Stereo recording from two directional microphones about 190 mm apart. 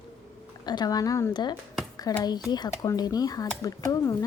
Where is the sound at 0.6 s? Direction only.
20° left (ahead or behind).